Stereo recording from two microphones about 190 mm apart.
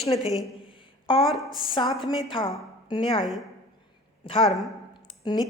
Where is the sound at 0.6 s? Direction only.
25° left (ahead or behind).